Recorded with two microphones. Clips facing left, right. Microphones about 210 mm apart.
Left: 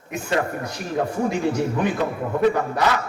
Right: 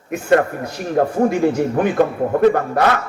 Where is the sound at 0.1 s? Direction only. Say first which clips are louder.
Right 8 dB; 55° right (ahead or behind).